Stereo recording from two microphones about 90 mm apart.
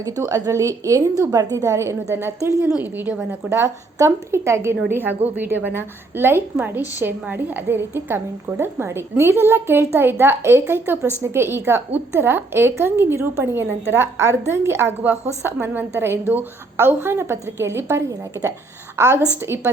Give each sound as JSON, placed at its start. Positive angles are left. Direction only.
{"t": 0.0, "sound": "a woman's voice", "side_deg": -40}
{"t": 3.5, "sound": "a woman's voice", "side_deg": -30}